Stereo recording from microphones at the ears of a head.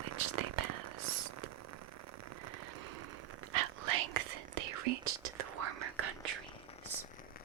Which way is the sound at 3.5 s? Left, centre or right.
Right.